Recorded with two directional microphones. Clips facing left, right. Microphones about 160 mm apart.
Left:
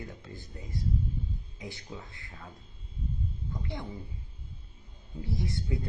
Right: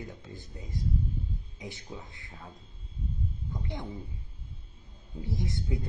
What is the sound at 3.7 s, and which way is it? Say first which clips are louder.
Speech: even; 20° right (ahead or behind).